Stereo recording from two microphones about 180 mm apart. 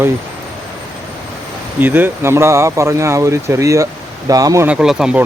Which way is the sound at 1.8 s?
10° right (ahead or behind).